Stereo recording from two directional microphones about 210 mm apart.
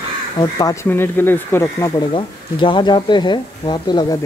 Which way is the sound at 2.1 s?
25° left (ahead or behind).